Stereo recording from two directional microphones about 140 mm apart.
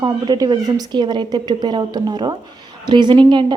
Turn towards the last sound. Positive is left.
turn(degrees=-35)  # may be behind; listen again after turning